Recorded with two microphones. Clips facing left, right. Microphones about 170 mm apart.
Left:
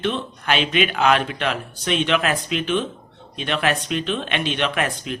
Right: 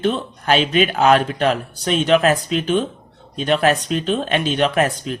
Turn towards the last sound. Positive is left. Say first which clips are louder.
# right 5 dB
turn(degrees=-40)  # may be behind; listen again after turning